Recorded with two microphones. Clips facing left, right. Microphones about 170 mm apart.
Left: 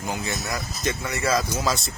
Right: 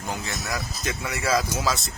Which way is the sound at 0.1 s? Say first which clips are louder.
Left 1 dB; centre (ahead or behind).